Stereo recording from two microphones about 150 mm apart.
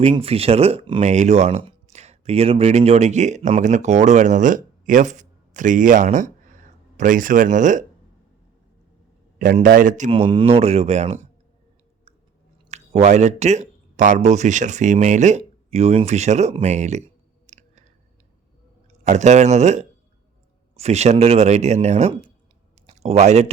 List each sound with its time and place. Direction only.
0.0 s speech: 40° right (ahead or behind)
1.0 s speech: 50° right (ahead or behind)
9.6 s speech: 60° right (ahead or behind)
10.1 s speech: 35° right (ahead or behind)
12.7 s speech: 50° right (ahead or behind)
17.4 s a sound: 55° right (ahead or behind)
19.0 s speech: 50° right (ahead or behind)